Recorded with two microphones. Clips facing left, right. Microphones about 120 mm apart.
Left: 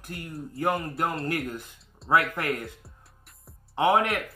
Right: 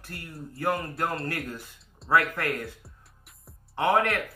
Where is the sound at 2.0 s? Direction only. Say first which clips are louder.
Left 1 dB; centre (ahead or behind).